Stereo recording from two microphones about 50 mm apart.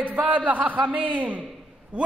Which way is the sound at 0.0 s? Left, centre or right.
Right.